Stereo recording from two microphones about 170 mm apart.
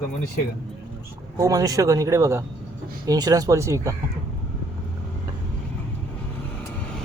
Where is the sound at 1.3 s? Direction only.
20° right (ahead or behind).